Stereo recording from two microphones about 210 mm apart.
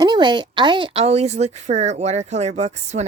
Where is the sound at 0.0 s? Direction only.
20° right (ahead or behind).